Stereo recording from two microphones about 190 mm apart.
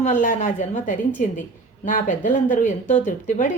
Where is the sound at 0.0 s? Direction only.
40° left (ahead or behind).